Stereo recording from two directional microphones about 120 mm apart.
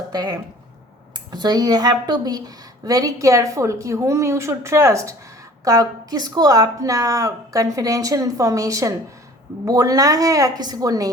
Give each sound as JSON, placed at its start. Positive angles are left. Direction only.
{"t": 0.1, "sound": "a woman's voice", "side_deg": -35}